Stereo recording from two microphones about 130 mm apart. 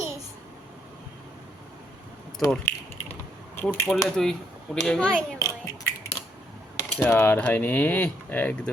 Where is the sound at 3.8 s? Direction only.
5° left (ahead or behind).